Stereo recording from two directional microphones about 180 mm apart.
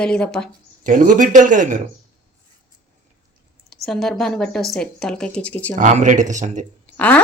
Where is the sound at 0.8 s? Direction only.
50° right (ahead or behind).